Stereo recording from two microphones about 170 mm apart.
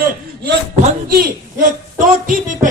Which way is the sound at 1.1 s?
55° right (ahead or behind).